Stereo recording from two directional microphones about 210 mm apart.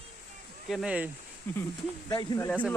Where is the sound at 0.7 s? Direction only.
5° right (ahead or behind).